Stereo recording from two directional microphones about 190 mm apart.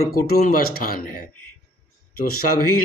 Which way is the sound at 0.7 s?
50° left (ahead or behind).